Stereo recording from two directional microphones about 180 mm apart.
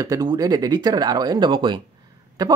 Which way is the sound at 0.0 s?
20° right (ahead or behind).